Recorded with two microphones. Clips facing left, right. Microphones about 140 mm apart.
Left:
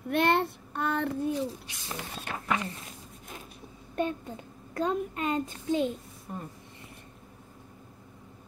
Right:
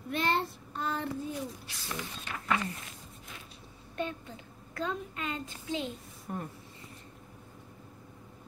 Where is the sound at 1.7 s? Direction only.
20° left (ahead or behind).